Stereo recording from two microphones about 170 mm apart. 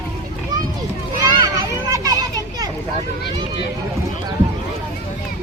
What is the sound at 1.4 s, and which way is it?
Children playing, 20° right (ahead or behind).